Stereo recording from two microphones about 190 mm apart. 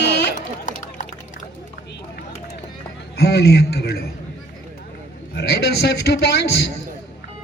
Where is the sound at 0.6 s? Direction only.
40° left (ahead or behind).